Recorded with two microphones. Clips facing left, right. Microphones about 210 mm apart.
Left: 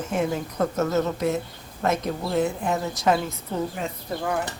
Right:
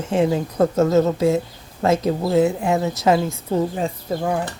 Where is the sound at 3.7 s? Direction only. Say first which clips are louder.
Right 6 dB; 35° right (ahead or behind).